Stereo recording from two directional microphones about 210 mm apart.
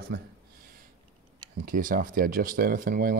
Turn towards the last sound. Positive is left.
turn(degrees=-45)  # may be behind; listen again after turning